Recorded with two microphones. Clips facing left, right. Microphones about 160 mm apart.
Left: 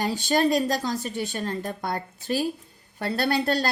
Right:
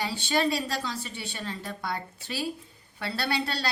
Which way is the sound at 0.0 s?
45° left (ahead or behind).